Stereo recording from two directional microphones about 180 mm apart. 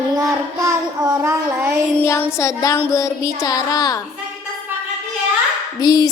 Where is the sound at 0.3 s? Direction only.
15° right (ahead or behind).